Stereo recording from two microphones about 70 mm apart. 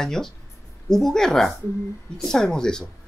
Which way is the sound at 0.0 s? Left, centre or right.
Centre.